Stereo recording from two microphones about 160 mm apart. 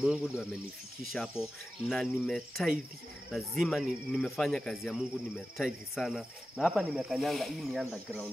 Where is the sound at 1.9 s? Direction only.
5° left (ahead or behind).